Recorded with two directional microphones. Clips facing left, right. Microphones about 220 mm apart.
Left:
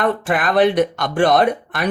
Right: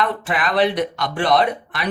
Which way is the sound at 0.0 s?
50° left (ahead or behind).